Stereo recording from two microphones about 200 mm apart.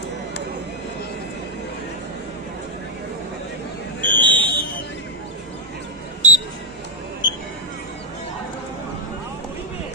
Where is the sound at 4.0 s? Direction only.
10° left (ahead or behind).